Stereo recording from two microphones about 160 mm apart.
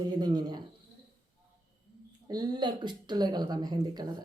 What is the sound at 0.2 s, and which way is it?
Speech, 25° right (ahead or behind).